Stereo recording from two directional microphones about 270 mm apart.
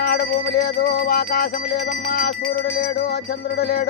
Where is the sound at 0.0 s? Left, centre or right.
Left.